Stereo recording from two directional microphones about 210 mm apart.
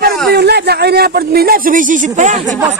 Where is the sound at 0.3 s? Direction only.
50° right (ahead or behind); by 2.4 s 35° right (ahead or behind).